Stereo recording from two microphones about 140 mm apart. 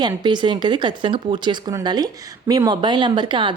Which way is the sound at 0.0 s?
30° right (ahead or behind).